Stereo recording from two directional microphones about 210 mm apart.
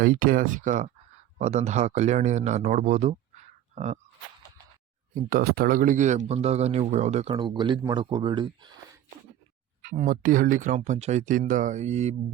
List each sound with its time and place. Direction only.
0.0 s speech: 40° right (ahead or behind)
5.1 s speech: 45° right (ahead or behind); by 8.8 s 20° right (ahead or behind)
10.0 s speech: 40° right (ahead or behind)